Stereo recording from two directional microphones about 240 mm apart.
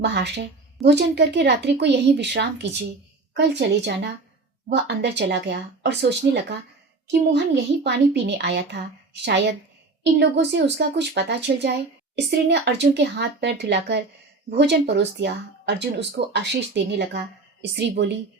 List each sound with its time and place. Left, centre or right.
0.0 s speech: right
7.9 s speech: right
10.0 s speech: right